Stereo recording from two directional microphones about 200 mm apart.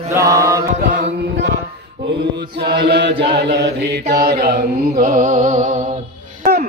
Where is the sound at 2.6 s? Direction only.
55° right (ahead or behind); by 5.9 s 35° right (ahead or behind).